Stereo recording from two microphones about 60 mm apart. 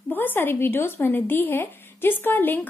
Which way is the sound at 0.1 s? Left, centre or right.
Left.